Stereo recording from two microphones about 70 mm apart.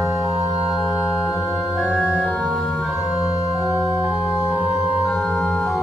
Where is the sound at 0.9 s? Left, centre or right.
Left.